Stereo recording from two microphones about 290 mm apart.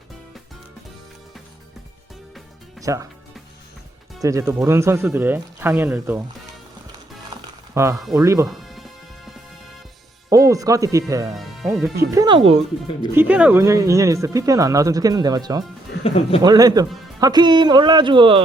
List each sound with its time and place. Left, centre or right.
2.8 s speech: centre
4.2 s speech: centre
7.3 s music: centre
8.0 s speech: centre
10.2 s speech: centre
11.3 s speech: centre
12.1 s speech: centre
13.0 s speech: centre
16.0 s speech: centre
16.4 s speech: centre